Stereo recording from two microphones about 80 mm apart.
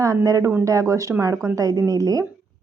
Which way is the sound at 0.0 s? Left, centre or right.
Right.